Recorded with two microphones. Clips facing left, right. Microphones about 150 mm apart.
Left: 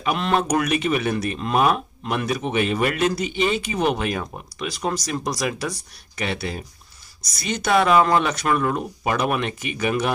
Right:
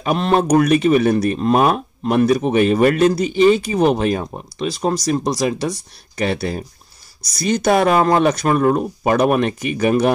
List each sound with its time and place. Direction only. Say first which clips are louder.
0.0 s speech: right 5 dB; 40° right (ahead or behind)